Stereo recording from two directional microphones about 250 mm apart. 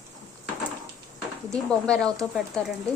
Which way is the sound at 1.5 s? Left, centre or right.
Centre.